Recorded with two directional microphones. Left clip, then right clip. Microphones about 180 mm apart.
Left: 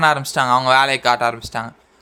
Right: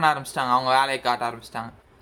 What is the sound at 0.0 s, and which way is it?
Speech, 35° left (ahead or behind).